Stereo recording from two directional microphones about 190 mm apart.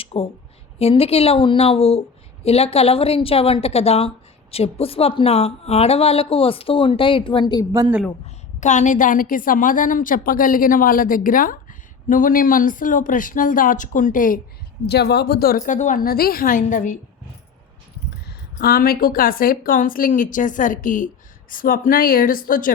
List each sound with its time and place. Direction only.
0.0 s a sound: 30° left (ahead or behind)
0.8 s a woman's voice: 30° left (ahead or behind)
7.7 s a woman's voice: 10° right (ahead or behind)
8.6 s a woman's voice: 40° left (ahead or behind)
14.8 s a woman's voice: 60° left (ahead or behind); by 17.0 s 40° left (ahead or behind)
18.6 s a woman's voice: 50° left (ahead or behind)